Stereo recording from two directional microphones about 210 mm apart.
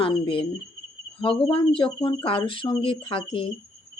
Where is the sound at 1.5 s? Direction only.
25° left (ahead or behind).